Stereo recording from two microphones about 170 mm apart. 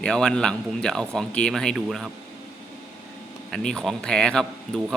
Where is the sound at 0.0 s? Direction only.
5° left (ahead or behind).